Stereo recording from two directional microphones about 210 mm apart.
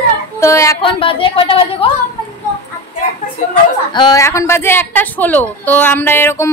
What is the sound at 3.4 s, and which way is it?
Speech, 35° left (ahead or behind).